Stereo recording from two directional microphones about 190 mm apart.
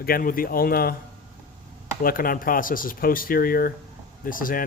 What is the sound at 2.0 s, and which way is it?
Speech, 50° left (ahead or behind).